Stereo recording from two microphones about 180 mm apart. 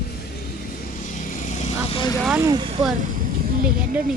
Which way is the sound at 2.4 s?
25° right (ahead or behind).